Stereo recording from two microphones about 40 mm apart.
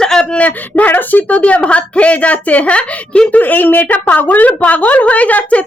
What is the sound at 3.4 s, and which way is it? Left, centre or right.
A woman's voice, left.